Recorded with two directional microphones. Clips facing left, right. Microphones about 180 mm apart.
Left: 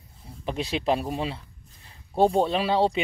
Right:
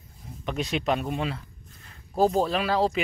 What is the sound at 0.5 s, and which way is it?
Speech, 30° left (ahead or behind).